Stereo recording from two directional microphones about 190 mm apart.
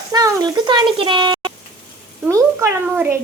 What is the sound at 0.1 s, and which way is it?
A child's voice, 20° right (ahead or behind).